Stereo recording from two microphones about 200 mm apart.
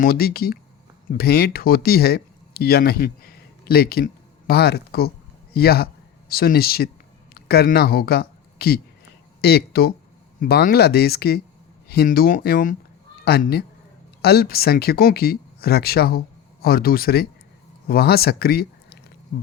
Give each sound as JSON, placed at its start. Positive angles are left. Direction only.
{"t": 0.0, "sound": "speech", "side_deg": 50}